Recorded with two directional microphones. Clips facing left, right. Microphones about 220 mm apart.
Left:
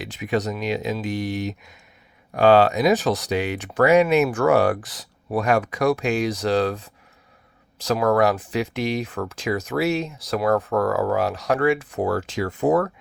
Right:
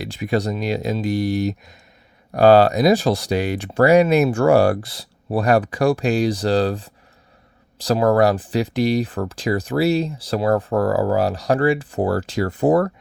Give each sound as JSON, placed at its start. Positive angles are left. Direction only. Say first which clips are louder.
{"t": 0.0, "sound": "speech", "louder": "right 3 dB", "side_deg": -35}